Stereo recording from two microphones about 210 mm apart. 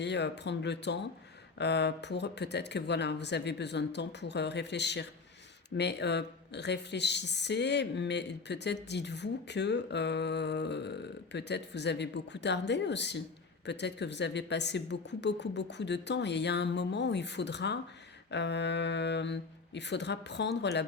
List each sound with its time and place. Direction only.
0.0 s speech: 55° left (ahead or behind)